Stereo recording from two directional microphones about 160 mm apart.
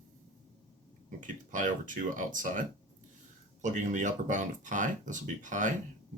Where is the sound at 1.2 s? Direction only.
55° right (ahead or behind).